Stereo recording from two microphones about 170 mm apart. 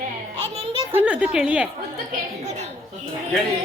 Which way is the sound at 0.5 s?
35° right (ahead or behind).